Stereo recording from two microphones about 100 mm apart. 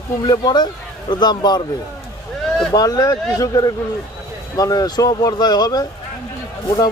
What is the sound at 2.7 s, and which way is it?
A man's voice, 40° left (ahead or behind).